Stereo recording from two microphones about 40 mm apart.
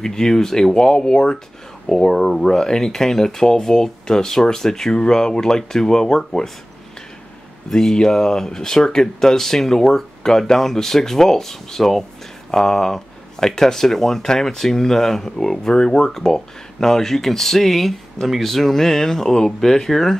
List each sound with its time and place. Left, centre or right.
0.0 s speech: centre
7.7 s speech: centre